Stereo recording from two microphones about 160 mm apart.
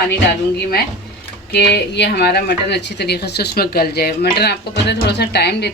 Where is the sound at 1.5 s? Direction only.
90° left.